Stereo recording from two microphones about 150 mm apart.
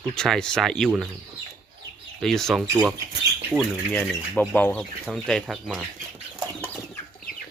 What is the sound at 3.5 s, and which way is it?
Speech, 10° left (ahead or behind).